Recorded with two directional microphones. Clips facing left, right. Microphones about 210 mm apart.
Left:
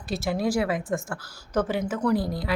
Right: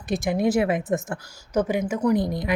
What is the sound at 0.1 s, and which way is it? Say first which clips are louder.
A woman's voice: right 4 dB; 15° right (ahead or behind).